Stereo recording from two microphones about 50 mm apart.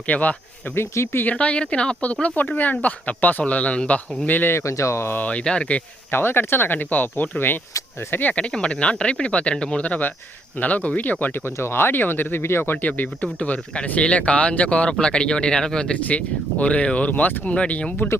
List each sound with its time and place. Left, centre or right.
0.1 s speech: left
0.8 s speech: left
1.3 s speech: left
4.3 s speech: left
4.5 s speech: left
5.3 s speech: left
6.1 s speech: left
8.4 s speech: centre
11.5 s speech: left
12.8 s speech: left; by 16.0 s centre
16.0 s speech: left